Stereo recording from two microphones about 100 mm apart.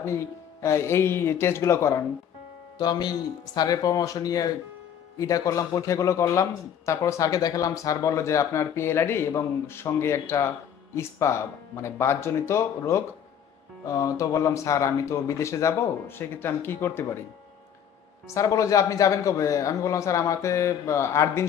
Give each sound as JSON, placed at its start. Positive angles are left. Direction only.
{"t": 0.0, "sound": "speech", "side_deg": 30}
{"t": 2.8, "sound": "speech", "side_deg": 45}
{"t": 18.3, "sound": "speech", "side_deg": 35}